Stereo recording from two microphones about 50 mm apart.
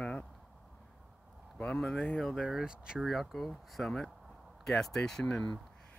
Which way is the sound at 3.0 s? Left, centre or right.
Centre.